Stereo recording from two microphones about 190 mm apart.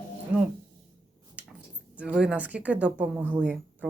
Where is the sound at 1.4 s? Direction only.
10° right (ahead or behind).